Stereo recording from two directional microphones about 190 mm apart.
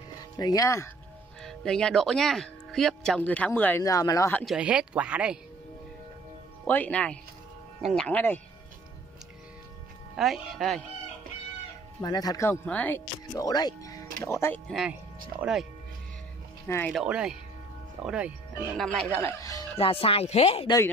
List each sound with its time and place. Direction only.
0.4 s speech: 20° left (ahead or behind)
1.4 s speech: centre (ahead or behind); by 4.3 s 20° left (ahead or behind)
4.3 s speech: 5° left (ahead or behind)
4.6 s speech: 5° right (ahead or behind)
6.6 s speech: 5° left (ahead or behind)
10.1 s speech: centre (ahead or behind)
12.0 s speech: 20° left (ahead or behind)
14.7 s speech: centre (ahead or behind)
16.6 s speech: 15° left (ahead or behind)
16.9 s speech: 5° right (ahead or behind)
18.8 s speech: 5° left (ahead or behind)
19.8 s speech: 30° left (ahead or behind)